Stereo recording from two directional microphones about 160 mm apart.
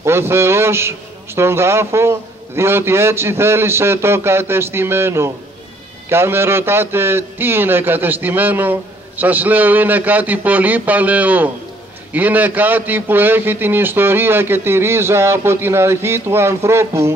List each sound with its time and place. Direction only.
0.0 s a man's voice: 15° right (ahead or behind)